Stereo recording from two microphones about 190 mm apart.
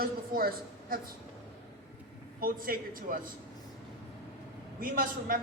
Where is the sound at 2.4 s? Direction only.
50° right (ahead or behind).